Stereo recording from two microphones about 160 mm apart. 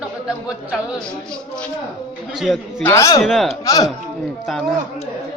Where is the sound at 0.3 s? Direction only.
5° right (ahead or behind).